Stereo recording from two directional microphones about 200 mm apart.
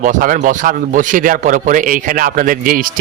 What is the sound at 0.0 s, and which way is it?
A man's voice, 40° right (ahead or behind).